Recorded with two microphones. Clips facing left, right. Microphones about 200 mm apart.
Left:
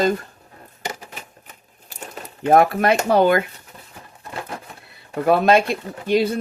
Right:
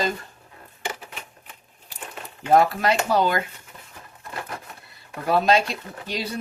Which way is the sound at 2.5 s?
55° left (ahead or behind).